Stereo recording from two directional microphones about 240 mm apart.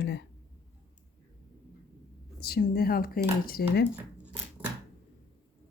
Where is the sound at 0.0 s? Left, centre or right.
Left.